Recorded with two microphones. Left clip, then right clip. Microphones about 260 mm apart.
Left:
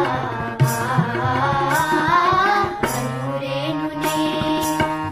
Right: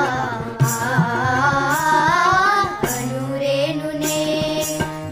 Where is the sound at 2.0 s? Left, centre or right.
Right.